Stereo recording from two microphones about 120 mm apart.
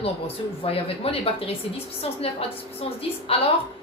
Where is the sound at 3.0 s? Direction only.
55° left (ahead or behind).